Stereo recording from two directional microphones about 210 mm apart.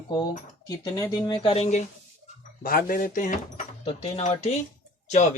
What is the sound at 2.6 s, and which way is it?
Speech, 45° left (ahead or behind).